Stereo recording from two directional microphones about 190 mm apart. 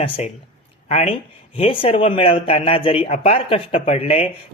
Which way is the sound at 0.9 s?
35° left (ahead or behind).